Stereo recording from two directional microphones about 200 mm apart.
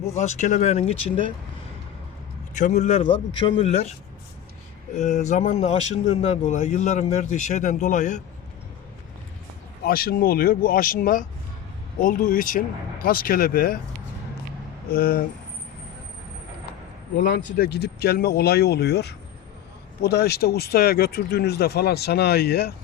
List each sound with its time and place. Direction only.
0.2 s a man's voice: 35° left (ahead or behind)
2.6 s a man's voice: 35° left (ahead or behind)
4.9 s a man's voice: 35° left (ahead or behind)
9.8 s speech: 50° left (ahead or behind)
14.8 s speech: 50° left (ahead or behind)
17.2 s speech: 55° left (ahead or behind)